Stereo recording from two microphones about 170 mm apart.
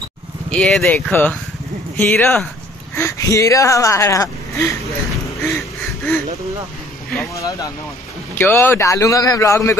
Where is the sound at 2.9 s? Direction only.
15° left (ahead or behind).